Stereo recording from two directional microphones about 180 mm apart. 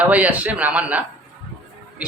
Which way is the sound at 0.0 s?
10° right (ahead or behind).